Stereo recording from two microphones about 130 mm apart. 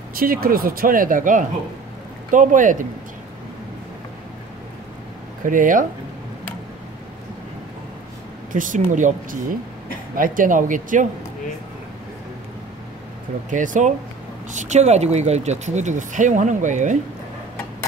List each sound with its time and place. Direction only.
0.2 s speech: 90° right
5.4 s speech: 90° right
8.5 s speech: 90° right
13.5 s speech: 80° right